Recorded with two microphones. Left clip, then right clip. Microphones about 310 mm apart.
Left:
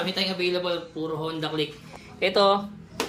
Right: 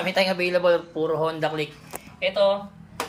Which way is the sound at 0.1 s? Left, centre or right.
Centre.